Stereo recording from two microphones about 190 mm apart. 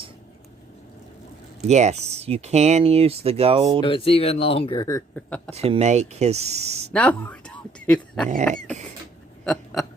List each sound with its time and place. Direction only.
1.6 s speech: 35° right (ahead or behind)
3.8 s speech: 30° left (ahead or behind)
5.5 s speech: 30° right (ahead or behind)
6.9 s speech: 5° left (ahead or behind)
8.4 s rodents: 5° left (ahead or behind)